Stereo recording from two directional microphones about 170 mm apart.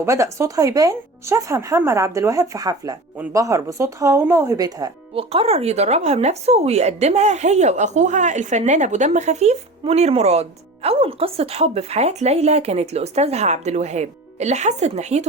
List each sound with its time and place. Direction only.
0.0 s speech: 15° right (ahead or behind)
5.1 s speech: 35° right (ahead or behind)